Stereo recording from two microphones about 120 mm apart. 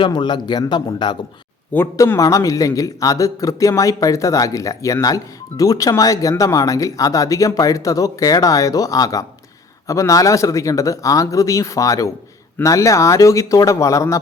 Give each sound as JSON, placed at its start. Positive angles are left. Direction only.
{"t": 0.0, "sound": "speech", "side_deg": 40}
{"t": 2.0, "sound": "speech", "side_deg": 30}